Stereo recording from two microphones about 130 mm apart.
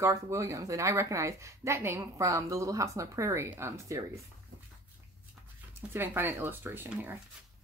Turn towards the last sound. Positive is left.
turn(degrees=-15)  # may be behind; listen again after turning